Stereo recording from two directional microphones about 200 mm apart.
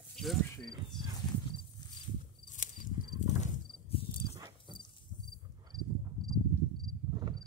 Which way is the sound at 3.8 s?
30° left (ahead or behind).